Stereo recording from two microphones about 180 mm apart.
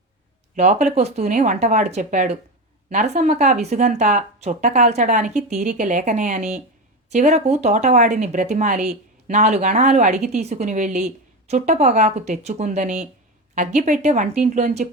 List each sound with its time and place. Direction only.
0.5 s a woman's voice: 45° right (ahead or behind)